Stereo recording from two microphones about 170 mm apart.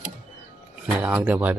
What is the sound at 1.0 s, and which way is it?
Speech, 10° right (ahead or behind).